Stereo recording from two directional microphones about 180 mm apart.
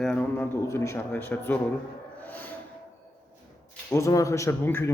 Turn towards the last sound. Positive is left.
turn(degrees=10)  # may be behind; listen again after turning